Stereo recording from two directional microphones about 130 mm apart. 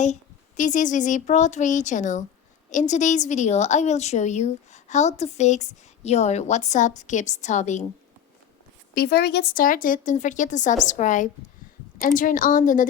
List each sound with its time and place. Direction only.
0.0 s a woman's voice: 70° left (ahead or behind)
9.6 s speech: 90° left
11.9 s a woman's voice: 90° left